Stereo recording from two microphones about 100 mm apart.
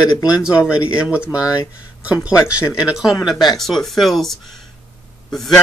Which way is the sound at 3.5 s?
5° left (ahead or behind).